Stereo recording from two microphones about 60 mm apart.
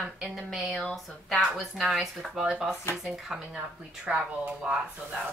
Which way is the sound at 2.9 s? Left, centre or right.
Left.